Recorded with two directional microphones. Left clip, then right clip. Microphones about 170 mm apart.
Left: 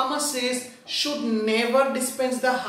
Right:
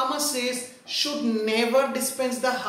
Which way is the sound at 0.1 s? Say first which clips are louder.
Left 1 dB; 15° right (ahead or behind).